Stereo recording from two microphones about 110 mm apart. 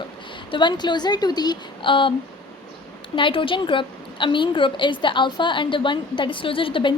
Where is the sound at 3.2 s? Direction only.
50° left (ahead or behind).